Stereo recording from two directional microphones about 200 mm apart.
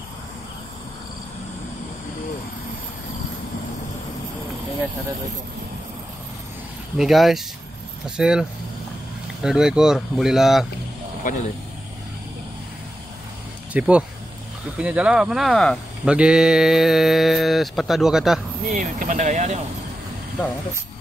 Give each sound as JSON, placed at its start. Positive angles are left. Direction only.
{"t": 7.0, "sound": "speech", "side_deg": 0}
{"t": 11.3, "sound": "speech", "side_deg": 45}
{"t": 13.7, "sound": "speech", "side_deg": -5}
{"t": 18.7, "sound": "speech", "side_deg": -40}